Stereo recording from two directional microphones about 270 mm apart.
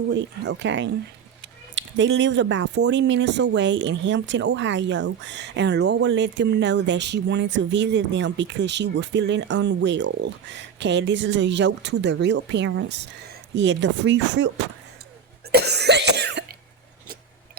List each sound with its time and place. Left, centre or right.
0.1 s speech: right
15.5 s cough: right